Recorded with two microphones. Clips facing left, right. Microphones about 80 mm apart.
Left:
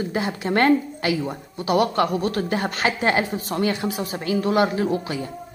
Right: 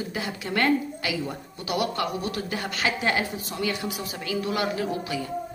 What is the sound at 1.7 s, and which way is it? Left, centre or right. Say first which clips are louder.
A woman's voice: left 7 dB; left.